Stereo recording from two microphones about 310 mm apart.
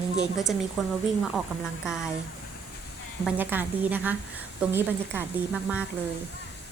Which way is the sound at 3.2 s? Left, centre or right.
Centre.